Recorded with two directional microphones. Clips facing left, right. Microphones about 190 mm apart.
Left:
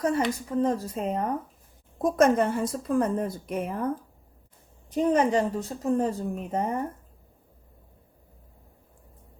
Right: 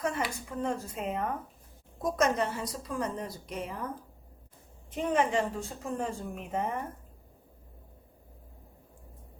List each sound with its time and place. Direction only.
0.5 s a woman's voice: 35° left (ahead or behind)
2.0 s a woman's voice: 55° left (ahead or behind)
4.9 s a woman's voice: 40° left (ahead or behind)